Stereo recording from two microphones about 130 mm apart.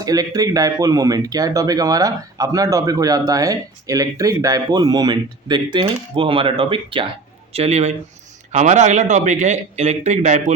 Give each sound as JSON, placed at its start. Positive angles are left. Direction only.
{"t": 0.0, "sound": "speech", "side_deg": -30}
{"t": 7.5, "sound": "a man's voice", "side_deg": -55}
{"t": 8.5, "sound": "a man's voice", "side_deg": -65}